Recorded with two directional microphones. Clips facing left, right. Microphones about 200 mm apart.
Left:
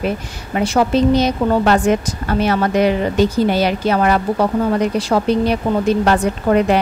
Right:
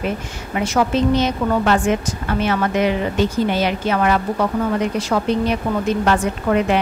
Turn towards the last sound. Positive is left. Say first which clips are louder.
# left 3 dB
turn(degrees=35)  # may be behind; listen again after turning